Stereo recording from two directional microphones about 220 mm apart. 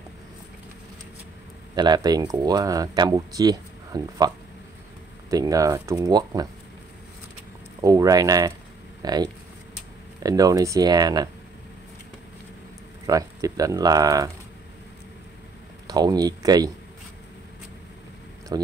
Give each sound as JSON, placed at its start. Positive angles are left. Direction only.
{"t": 1.8, "sound": "speech", "side_deg": -20}
{"t": 5.3, "sound": "speech", "side_deg": -15}
{"t": 7.8, "sound": "speech", "side_deg": -15}
{"t": 13.0, "sound": "speech", "side_deg": -15}
{"t": 15.9, "sound": "speech", "side_deg": -15}
{"t": 18.5, "sound": "speech", "side_deg": -20}